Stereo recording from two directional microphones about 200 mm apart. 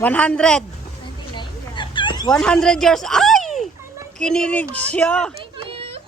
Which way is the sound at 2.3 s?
5° left (ahead or behind).